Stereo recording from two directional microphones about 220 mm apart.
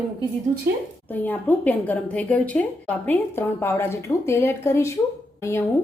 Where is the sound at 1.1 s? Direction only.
10° left (ahead or behind).